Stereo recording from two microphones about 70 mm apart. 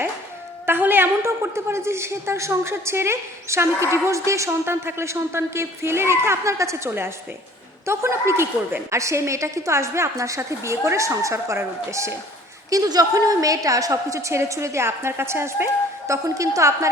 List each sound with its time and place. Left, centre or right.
0.6 s a woman's voice: right
12.7 s a woman's voice: right